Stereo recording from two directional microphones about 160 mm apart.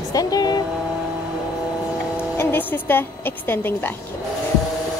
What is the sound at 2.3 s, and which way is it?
A woman's voice, 15° left (ahead or behind).